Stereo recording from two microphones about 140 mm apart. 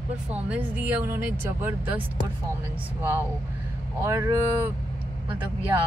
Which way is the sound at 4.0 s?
20° right (ahead or behind).